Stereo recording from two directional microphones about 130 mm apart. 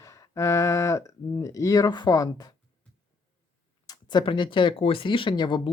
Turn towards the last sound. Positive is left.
turn(degrees=35)  # may be behind; listen again after turning